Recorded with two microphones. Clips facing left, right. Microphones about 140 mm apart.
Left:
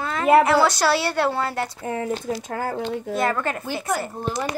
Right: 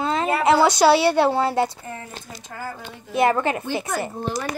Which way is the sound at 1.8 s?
75° left (ahead or behind).